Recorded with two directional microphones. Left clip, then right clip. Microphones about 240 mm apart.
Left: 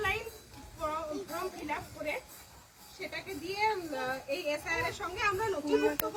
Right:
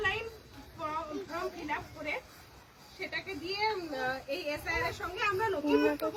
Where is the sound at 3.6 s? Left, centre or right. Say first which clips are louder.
Left 1 dB; centre.